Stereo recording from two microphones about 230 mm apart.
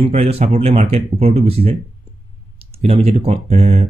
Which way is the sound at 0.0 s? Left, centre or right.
Right.